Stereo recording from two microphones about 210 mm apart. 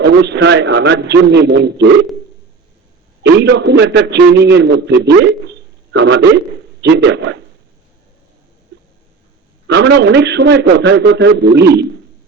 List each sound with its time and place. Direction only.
0.0 s a man's voice: 55° right (ahead or behind)
3.4 s a man's voice: 55° right (ahead or behind)
9.6 s a man's voice: 55° right (ahead or behind)